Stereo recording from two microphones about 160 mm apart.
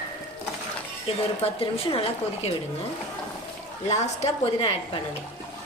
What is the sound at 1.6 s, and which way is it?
Speech, 35° left (ahead or behind).